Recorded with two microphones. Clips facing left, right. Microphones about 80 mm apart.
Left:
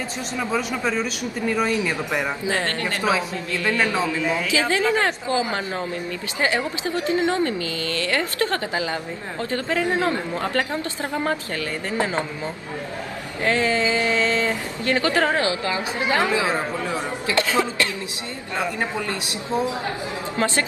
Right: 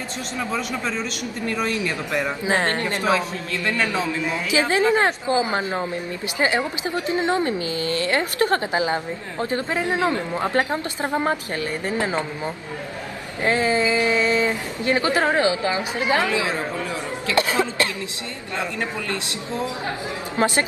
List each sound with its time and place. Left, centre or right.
0.5 s speech: centre
2.5 s a woman's voice: right
3.0 s speech: centre
4.5 s a woman's voice: right
13.4 s a woman's voice: right
16.2 s a man's voice: left
17.4 s a sound: right
18.6 s a man's voice: left
20.3 s a woman's voice: right